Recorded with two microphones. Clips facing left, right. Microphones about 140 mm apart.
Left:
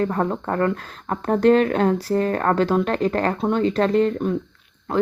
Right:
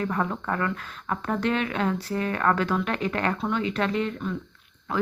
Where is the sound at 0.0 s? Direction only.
35° left (ahead or behind).